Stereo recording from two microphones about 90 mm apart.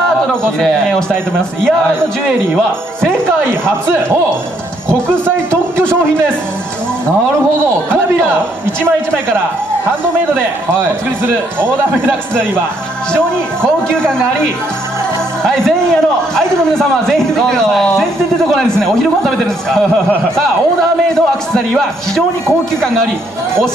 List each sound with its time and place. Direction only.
5.8 s a man's voice: 25° right (ahead or behind)
10.3 s a man's voice: 25° right (ahead or behind)
15.4 s a man's voice: 5° left (ahead or behind)
19.2 s a man's voice: 5° left (ahead or behind)
21.1 s a man's voice: 5° left (ahead or behind)